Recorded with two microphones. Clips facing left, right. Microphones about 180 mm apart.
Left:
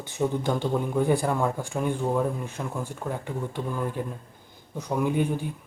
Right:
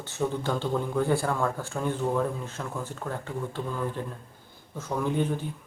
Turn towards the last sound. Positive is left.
turn(degrees=15)  # may be behind; listen again after turning